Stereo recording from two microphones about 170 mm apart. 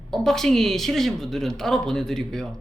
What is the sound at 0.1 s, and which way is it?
Speech, centre (ahead or behind).